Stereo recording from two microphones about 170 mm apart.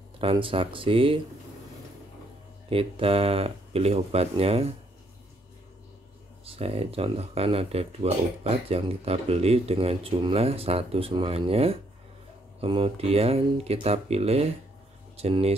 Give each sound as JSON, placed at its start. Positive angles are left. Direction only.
{"t": 0.2, "sound": "speech", "side_deg": -30}
{"t": 2.7, "sound": "speech", "side_deg": -35}
{"t": 6.4, "sound": "speech", "side_deg": -35}